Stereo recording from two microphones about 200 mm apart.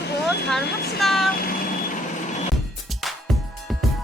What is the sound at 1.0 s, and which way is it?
Speech, centre (ahead or behind).